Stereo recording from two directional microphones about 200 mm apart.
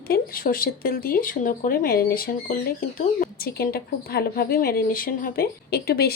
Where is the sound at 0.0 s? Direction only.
50° left (ahead or behind).